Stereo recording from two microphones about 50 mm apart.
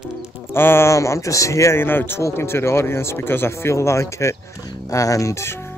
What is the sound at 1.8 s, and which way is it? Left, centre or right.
Speech, left.